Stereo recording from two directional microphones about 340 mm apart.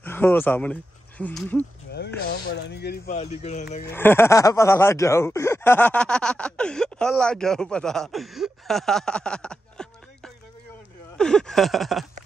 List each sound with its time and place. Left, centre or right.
0.0 s speech: centre
2.3 s speech: left
3.8 s speech: centre